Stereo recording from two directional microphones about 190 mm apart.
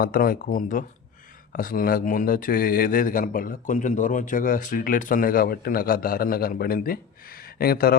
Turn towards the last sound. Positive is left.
turn(degrees=55)  # may be behind; listen again after turning